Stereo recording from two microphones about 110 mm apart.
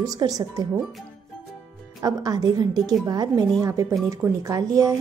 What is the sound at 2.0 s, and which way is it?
A woman's voice, 35° right (ahead or behind).